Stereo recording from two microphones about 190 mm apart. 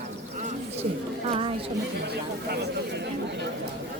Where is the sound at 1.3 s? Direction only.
30° right (ahead or behind).